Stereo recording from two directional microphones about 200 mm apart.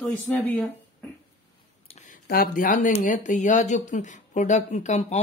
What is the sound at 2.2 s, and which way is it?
Speech, 45° left (ahead or behind).